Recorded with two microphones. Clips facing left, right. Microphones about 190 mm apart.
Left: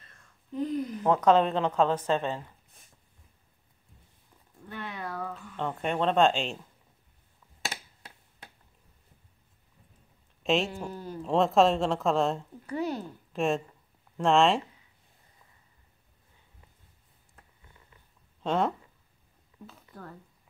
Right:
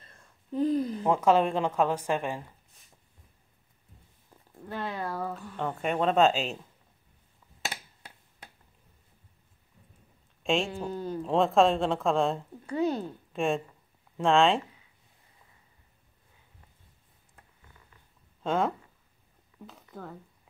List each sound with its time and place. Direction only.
0.5 s speech: 35° right (ahead or behind)
1.0 s speech: 10° right (ahead or behind)
4.6 s speech: 30° right (ahead or behind)
5.2 s speech: 5° right (ahead or behind)
10.4 s speech: centre (ahead or behind)
10.7 s speech: 20° right (ahead or behind)
11.2 s speech: centre (ahead or behind)
12.6 s speech: 25° right (ahead or behind)
13.3 s speech: centre (ahead or behind)
18.4 s speech: centre (ahead or behind)